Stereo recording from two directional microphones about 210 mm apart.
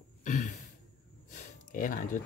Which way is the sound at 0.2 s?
35° left (ahead or behind).